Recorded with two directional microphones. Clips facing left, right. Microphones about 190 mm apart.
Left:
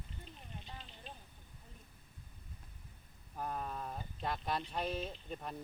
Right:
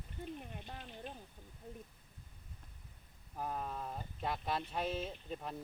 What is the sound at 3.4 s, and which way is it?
Speech, 5° right (ahead or behind).